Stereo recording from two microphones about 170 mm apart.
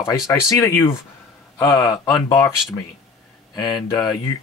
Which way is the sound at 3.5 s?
25° left (ahead or behind).